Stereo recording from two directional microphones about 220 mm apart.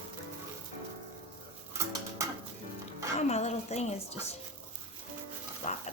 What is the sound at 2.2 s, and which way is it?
Music, 15° right (ahead or behind).